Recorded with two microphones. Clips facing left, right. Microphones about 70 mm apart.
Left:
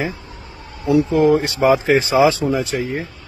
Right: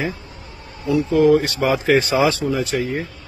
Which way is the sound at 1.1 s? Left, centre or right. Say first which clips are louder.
Even; left.